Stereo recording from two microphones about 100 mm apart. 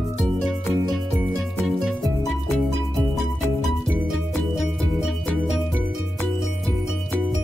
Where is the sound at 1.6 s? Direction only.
Centre (ahead or behind).